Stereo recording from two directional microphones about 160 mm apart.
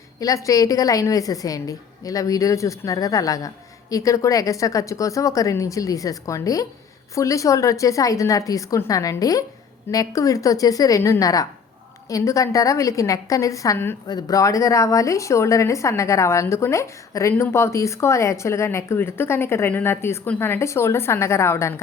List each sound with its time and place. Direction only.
0.2 s a woman's voice: 20° left (ahead or behind)